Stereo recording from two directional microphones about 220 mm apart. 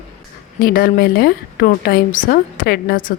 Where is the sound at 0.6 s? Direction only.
40° left (ahead or behind).